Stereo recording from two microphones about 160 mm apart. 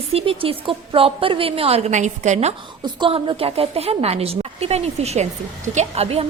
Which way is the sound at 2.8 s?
30° right (ahead or behind).